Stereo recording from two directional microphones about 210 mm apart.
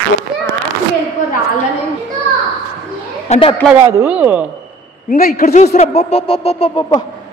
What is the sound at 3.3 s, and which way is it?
Speech, 25° left (ahead or behind).